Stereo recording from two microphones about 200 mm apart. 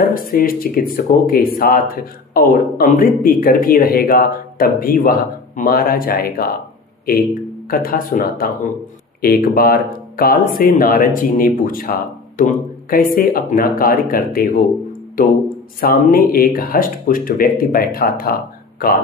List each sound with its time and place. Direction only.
0.0 s speech: 45° left (ahead or behind)
7.7 s speech: 45° left (ahead or behind)